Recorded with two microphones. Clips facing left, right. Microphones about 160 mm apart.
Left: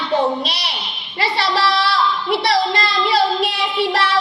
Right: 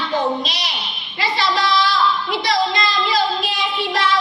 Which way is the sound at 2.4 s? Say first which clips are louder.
Even; 65° left (ahead or behind).